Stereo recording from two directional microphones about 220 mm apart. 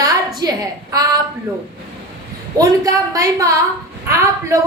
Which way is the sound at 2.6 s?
15° right (ahead or behind).